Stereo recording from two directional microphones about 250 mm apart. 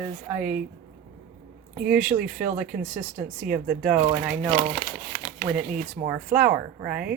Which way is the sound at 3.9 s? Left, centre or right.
Right.